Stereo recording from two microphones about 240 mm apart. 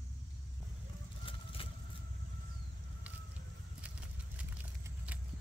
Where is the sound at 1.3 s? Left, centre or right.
Left.